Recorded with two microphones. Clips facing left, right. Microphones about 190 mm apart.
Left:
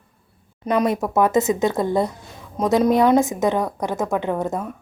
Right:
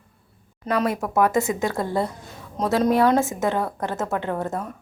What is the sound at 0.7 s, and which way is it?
A woman's voice, 20° left (ahead or behind).